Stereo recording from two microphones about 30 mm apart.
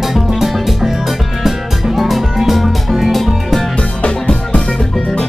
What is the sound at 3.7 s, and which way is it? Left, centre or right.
Music, left.